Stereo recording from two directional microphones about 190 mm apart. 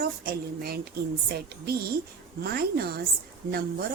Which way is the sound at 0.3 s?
55° right (ahead or behind).